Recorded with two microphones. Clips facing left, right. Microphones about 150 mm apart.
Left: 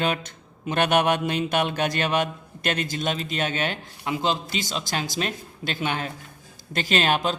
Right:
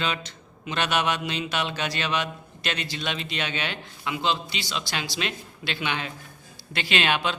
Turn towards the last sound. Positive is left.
turn(degrees=40)  # may be behind; listen again after turning